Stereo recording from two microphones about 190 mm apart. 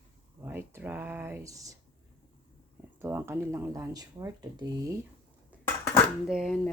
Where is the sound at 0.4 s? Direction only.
10° right (ahead or behind).